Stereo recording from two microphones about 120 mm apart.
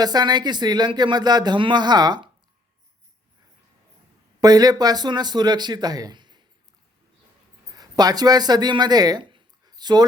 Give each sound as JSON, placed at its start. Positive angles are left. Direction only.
{"t": 0.0, "sound": "speech", "side_deg": -35}
{"t": 4.4, "sound": "speech", "side_deg": -35}
{"t": 7.8, "sound": "speech", "side_deg": -35}